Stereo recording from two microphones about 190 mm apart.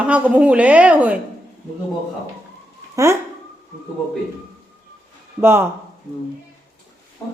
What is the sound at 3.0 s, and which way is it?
Speech, 15° right (ahead or behind).